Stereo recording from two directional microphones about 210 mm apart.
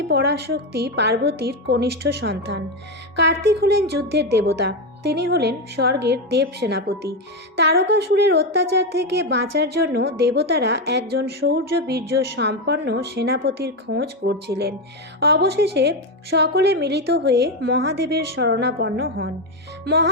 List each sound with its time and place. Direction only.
0.1 s a woman's voice: 50° right (ahead or behind)
19.8 s music: 50° right (ahead or behind)